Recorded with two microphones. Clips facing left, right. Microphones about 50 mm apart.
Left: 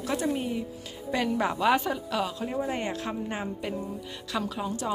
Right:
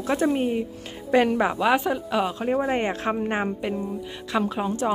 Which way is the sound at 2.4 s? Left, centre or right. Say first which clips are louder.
Right 7 dB; right.